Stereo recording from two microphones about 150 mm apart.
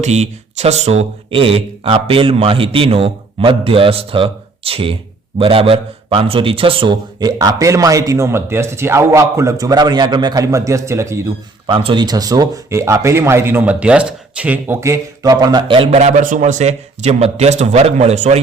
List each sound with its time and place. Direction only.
0.0 s a man's voice: 45° right (ahead or behind); by 11.2 s 20° right (ahead or behind)
11.6 s a man's voice: 35° right (ahead or behind)
16.0 s speech: 55° right (ahead or behind)